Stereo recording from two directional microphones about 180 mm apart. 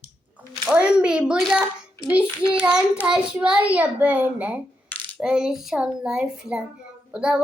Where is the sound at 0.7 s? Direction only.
5° right (ahead or behind).